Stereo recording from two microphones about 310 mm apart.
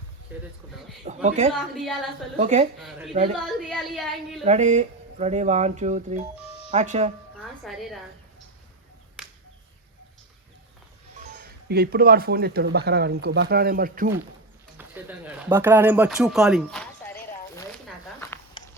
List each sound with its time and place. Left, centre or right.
1.0 s speech: right
1.7 s speech: centre
2.4 s speech: right
3.3 s speech: centre
4.4 s speech: right
7.6 s speech: centre
11.2 s speech: right
14.8 s speech: centre
18.2 s a sound: centre